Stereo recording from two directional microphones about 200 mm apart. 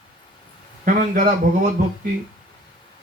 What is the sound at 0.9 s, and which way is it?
Speech, 40° right (ahead or behind).